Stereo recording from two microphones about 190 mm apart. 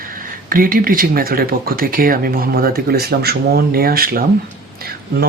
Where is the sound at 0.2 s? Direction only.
50° right (ahead or behind).